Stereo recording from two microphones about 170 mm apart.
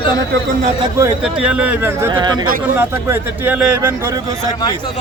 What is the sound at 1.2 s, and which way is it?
Speech, 5° right (ahead or behind).